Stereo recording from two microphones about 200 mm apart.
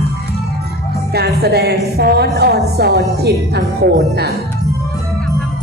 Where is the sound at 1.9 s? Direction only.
55° right (ahead or behind).